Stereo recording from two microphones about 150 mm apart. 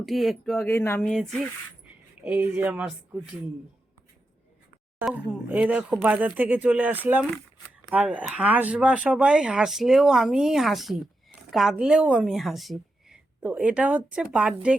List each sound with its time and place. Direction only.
0.0 s speech: centre (ahead or behind)
0.7 s speech: 15° left (ahead or behind)
1.0 s speech: 5° left (ahead or behind)
2.2 s speech: 10° right (ahead or behind)
4.9 s speech: 10° right (ahead or behind)